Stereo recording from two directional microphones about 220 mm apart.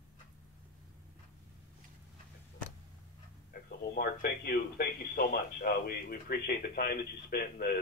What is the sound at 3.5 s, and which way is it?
Speech, 40° left (ahead or behind).